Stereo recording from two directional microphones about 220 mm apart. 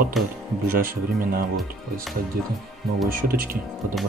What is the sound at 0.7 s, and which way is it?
Speech, 40° right (ahead or behind).